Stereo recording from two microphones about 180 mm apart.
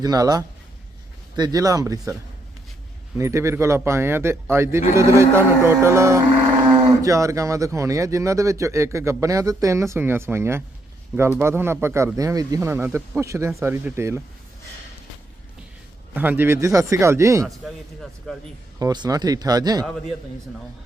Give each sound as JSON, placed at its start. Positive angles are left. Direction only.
{"t": 0.0, "sound": "speech", "side_deg": -20}
{"t": 3.2, "sound": "speech", "side_deg": -15}
{"t": 16.1, "sound": "speech", "side_deg": -10}
{"t": 18.8, "sound": "speech", "side_deg": -20}